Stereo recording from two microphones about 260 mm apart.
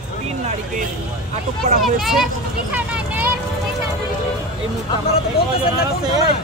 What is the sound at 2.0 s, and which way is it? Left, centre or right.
Speech, centre.